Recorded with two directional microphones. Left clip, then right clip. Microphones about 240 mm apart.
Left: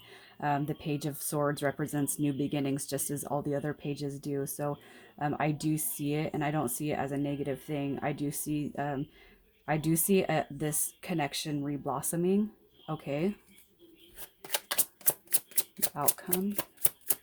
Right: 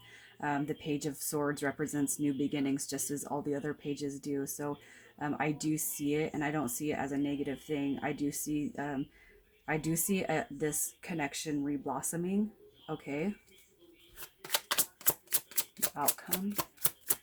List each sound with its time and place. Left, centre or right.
0.1 s speech: left
14.5 s typewriter: centre
16.0 s speech: centre